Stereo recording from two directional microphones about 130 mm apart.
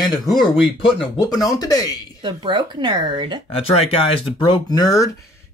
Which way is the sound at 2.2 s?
35° right (ahead or behind).